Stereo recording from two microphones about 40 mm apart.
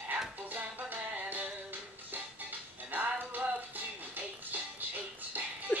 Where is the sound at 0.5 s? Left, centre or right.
Right.